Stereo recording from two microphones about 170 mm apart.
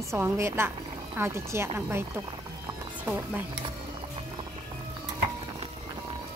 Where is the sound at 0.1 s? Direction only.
15° right (ahead or behind).